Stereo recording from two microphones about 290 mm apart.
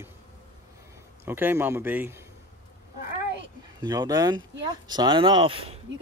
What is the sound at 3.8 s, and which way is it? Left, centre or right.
Speech, centre.